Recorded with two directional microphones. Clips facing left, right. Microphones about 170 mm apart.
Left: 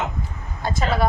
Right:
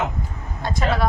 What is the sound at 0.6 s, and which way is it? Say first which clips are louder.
Speech: even; centre (ahead or behind).